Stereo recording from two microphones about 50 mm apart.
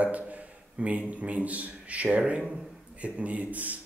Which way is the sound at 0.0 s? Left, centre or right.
Right.